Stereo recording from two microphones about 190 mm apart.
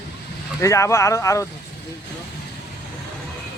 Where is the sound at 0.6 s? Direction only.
15° left (ahead or behind).